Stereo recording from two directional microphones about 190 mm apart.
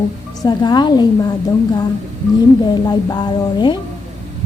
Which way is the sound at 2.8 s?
20° left (ahead or behind).